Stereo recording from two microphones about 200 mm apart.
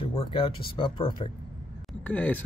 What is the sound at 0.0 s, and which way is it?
Speech, 20° left (ahead or behind).